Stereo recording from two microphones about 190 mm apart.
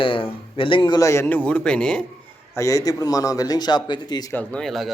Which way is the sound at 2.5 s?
15° left (ahead or behind).